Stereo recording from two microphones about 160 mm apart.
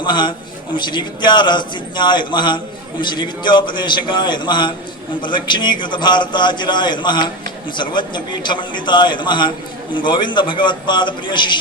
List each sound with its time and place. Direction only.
0.0 s a man's voice: 30° left (ahead or behind)